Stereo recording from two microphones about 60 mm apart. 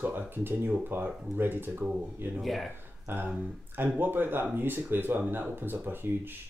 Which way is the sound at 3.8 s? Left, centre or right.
Right.